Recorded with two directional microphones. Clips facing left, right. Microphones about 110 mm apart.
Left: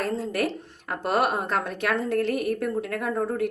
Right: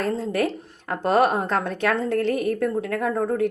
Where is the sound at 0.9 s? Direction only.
30° right (ahead or behind).